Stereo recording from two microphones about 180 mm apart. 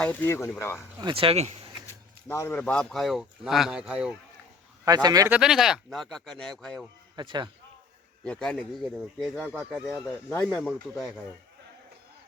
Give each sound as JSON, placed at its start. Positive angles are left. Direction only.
{"t": 0.0, "sound": "speech", "side_deg": 10}
{"t": 1.0, "sound": "speech", "side_deg": -30}
{"t": 1.9, "sound": "speech", "side_deg": 15}
{"t": 5.0, "sound": "speech", "side_deg": -20}
{"t": 5.3, "sound": "speech", "side_deg": -5}
{"t": 7.2, "sound": "speech", "side_deg": -25}
{"t": 8.2, "sound": "speech", "side_deg": 5}